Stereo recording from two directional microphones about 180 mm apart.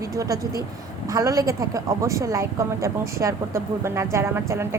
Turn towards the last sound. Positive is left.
turn(degrees=-15)  # may be behind; listen again after turning